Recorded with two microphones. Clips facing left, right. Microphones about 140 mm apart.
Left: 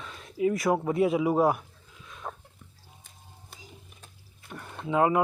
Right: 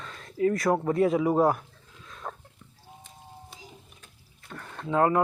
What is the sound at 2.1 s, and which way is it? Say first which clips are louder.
Dog: even; 10° left (ahead or behind).